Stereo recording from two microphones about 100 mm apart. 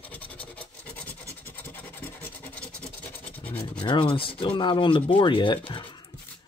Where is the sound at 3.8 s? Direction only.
60° left (ahead or behind).